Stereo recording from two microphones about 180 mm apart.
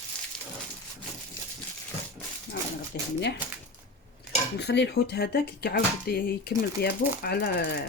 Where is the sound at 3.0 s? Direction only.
65° left (ahead or behind).